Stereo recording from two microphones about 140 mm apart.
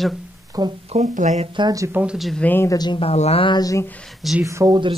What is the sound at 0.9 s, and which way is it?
Speech, 55° right (ahead or behind).